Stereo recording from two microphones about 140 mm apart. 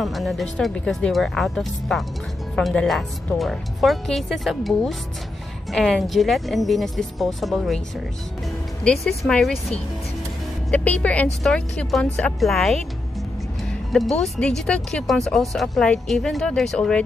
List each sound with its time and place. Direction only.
0.0 s speech: centre (ahead or behind)
8.8 s speech: 5° left (ahead or behind)
10.7 s speech: 10° left (ahead or behind)
13.9 s speech: centre (ahead or behind)